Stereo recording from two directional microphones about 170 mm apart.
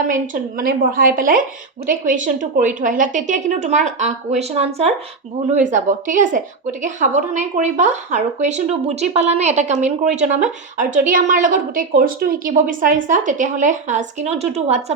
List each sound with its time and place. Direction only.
0.1 s a woman's voice: 55° right (ahead or behind); by 14.8 s 40° right (ahead or behind)